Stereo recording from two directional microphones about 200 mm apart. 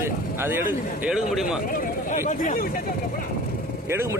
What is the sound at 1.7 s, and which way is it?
Speech, 40° left (ahead or behind).